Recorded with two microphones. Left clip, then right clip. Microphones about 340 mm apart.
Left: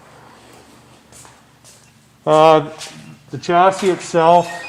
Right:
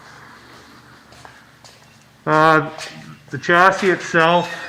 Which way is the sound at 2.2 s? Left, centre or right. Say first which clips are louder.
Left 3 dB; centre.